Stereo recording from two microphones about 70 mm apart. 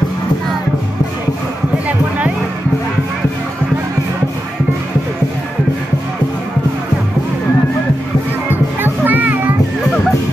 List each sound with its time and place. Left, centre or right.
1.9 s music: right
8.8 s music: right